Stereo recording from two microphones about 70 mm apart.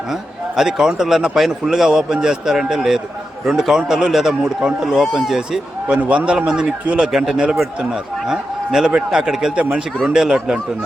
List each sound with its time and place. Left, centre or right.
0.1 s a man's voice: centre
5.9 s a man's voice: centre
9.6 s speech: centre
10.1 s a man's voice: centre